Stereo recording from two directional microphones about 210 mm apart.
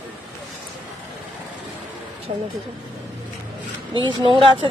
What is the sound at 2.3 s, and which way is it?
Speech, 30° right (ahead or behind).